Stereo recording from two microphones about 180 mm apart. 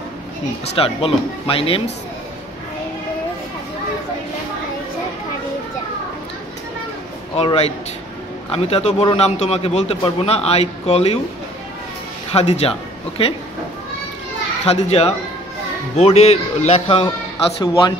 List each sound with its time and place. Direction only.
0.7 s a man's voice: 30° left (ahead or behind)
7.3 s a man's voice: 35° left (ahead or behind)
12.3 s a man's voice: 35° left (ahead or behind)
14.6 s a man's voice: 35° left (ahead or behind)